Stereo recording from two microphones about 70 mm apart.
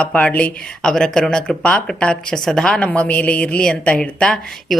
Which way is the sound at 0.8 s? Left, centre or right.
Centre.